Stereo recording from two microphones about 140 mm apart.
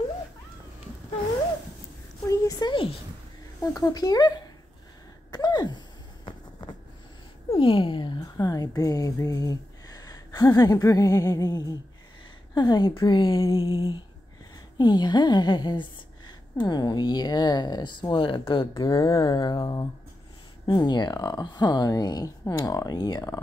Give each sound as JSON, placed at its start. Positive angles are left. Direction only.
{"t": 2.2, "sound": "a sound", "side_deg": 25}
{"t": 2.7, "sound": "a woman's voice", "side_deg": 40}
{"t": 3.7, "sound": "speech", "side_deg": 25}
{"t": 5.3, "sound": "gasp", "side_deg": 30}
{"t": 7.5, "sound": "speech", "side_deg": 40}
{"t": 13.6, "sound": "a woman's voice", "side_deg": 40}
{"t": 18.7, "sound": "speech", "side_deg": 25}